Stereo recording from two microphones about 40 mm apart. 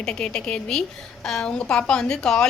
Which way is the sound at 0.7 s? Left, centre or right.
Centre.